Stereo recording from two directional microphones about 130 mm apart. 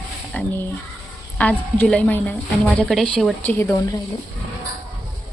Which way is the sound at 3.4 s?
15° left (ahead or behind).